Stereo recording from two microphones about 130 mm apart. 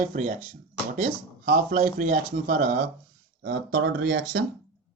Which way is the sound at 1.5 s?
90° right.